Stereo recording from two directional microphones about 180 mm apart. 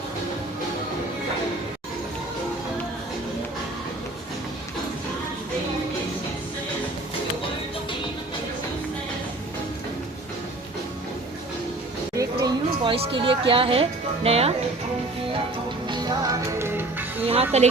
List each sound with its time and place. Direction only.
12.1 s a sound: 20° right (ahead or behind)
14.3 s speech: 35° right (ahead or behind)
15.9 s music: 20° right (ahead or behind)
17.5 s speech: 35° right (ahead or behind)